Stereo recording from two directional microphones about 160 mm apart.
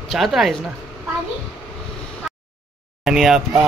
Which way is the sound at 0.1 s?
Centre (ahead or behind).